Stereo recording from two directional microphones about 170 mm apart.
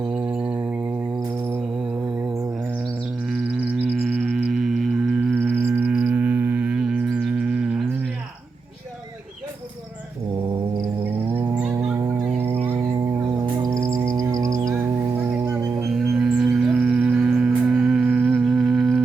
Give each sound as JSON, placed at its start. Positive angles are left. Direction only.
{"t": 0.0, "sound": "a sound", "side_deg": -10}
{"t": 1.2, "sound": "cricket", "side_deg": -10}
{"t": 2.6, "sound": "bird", "side_deg": -10}
{"t": 3.2, "sound": "music", "side_deg": -5}
{"t": 11.3, "sound": "a sound", "side_deg": -10}
{"t": 11.9, "sound": "music", "side_deg": -15}
{"t": 12.6, "sound": "cricket", "side_deg": -15}
{"t": 15.8, "sound": "music", "side_deg": 0}